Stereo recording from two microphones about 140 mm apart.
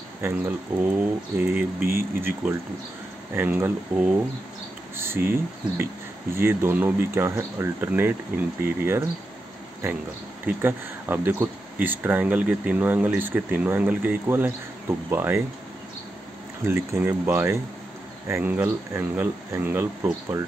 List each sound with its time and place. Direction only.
0.7 s speech: 10° right (ahead or behind)
1.8 s speech: 90° right
3.3 s speech: 15° right (ahead or behind)
10.4 s speech: 15° right (ahead or behind)
16.6 s speech: 20° right (ahead or behind)